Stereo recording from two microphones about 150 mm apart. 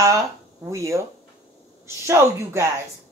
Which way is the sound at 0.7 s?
20° right (ahead or behind).